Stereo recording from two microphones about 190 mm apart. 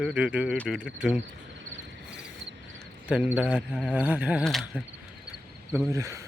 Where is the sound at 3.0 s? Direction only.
5° right (ahead or behind).